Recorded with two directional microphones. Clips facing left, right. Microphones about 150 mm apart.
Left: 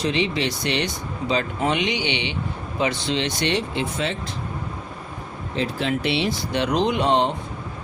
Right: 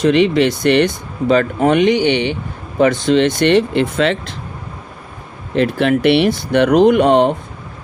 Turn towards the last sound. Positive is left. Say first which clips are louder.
# right 9 dB
turn(degrees=-55)  # may be behind; listen again after turning